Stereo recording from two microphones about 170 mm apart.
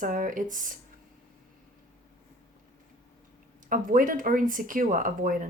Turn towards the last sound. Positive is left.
turn(degrees=-50)  # may be behind; listen again after turning